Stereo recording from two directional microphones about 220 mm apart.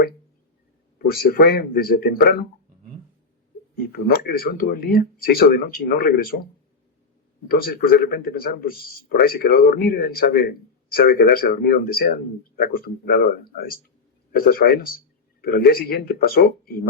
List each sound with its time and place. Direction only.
0.9 s speech: 45° left (ahead or behind)
3.8 s speech: 45° left (ahead or behind)
7.4 s speech: 45° left (ahead or behind)